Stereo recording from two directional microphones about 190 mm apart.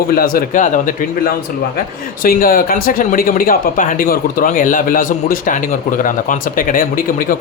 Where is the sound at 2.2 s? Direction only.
50° left (ahead or behind).